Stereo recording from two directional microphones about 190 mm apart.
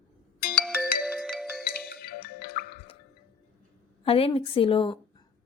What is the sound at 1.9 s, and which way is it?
Music, 55° left (ahead or behind).